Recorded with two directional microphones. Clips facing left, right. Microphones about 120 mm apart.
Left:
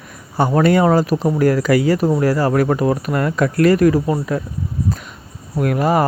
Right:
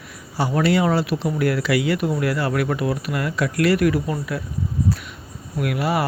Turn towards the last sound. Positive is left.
turn(degrees=40)  # may be behind; listen again after turning